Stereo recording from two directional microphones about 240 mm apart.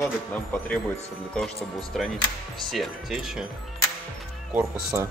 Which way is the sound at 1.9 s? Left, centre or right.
Centre.